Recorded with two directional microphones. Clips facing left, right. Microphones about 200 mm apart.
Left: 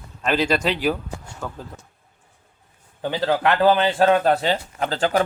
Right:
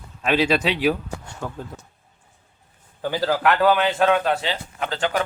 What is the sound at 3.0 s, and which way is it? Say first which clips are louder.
Speech: even; 25° left (ahead or behind).